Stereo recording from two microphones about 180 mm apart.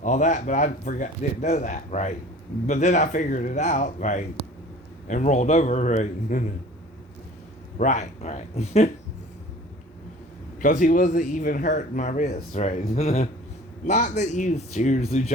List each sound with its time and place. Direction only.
0.0 s speech: 45° left (ahead or behind)
7.8 s speech: 40° left (ahead or behind)
10.6 s speech: 45° left (ahead or behind)